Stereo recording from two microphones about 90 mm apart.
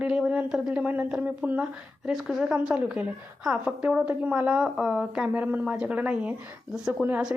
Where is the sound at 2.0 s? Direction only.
5° right (ahead or behind).